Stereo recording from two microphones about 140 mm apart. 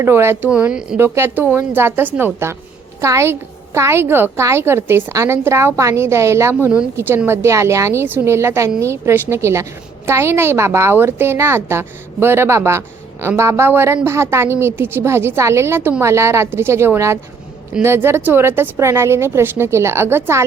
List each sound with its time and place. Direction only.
0.0 s a woman's voice: 15° right (ahead or behind)
0.9 s a woman's voice: 15° right (ahead or behind)